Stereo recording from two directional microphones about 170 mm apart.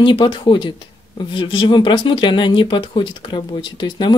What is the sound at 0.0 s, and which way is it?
Speech, 30° left (ahead or behind).